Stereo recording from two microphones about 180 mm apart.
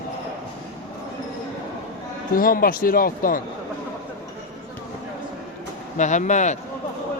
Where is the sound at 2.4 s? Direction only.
50° left (ahead or behind).